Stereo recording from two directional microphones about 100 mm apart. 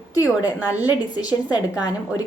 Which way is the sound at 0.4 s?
15° right (ahead or behind).